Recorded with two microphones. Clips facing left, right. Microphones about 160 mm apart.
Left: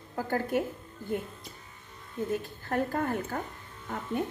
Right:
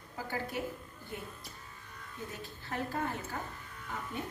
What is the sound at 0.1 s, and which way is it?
Speech, 50° left (ahead or behind).